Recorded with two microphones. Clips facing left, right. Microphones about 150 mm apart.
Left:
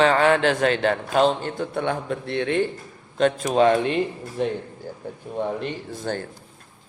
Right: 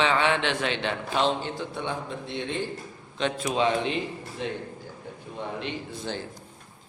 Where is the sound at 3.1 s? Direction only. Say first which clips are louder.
Left 7 dB; 45° left (ahead or behind).